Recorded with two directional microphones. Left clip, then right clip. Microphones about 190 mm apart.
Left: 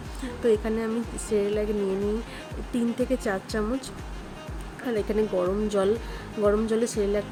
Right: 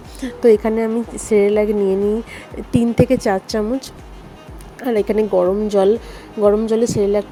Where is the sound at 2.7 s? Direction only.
35° right (ahead or behind).